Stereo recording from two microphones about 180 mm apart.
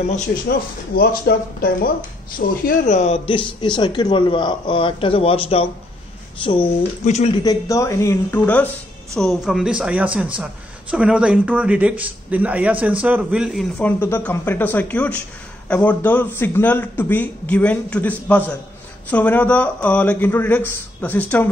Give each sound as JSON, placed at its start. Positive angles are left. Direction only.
{"t": 0.5, "sound": "speech", "side_deg": 60}
{"t": 3.3, "sound": "speech", "side_deg": 25}
{"t": 7.1, "sound": "speech", "side_deg": 40}
{"t": 7.4, "sound": "a man's voice", "side_deg": 15}
{"t": 9.1, "sound": "a man's voice", "side_deg": 0}